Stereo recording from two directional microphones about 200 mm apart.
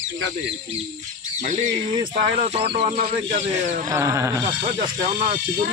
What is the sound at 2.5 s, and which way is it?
Speech, 30° right (ahead or behind).